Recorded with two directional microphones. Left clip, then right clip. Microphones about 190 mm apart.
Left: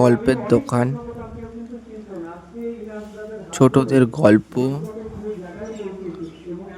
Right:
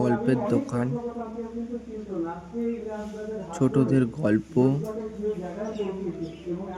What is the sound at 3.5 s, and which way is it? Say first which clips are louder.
A man's voice: left 8 dB; 35° left (ahead or behind).